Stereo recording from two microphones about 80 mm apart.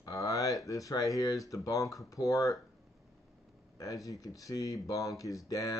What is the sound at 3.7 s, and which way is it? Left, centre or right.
Speech, left.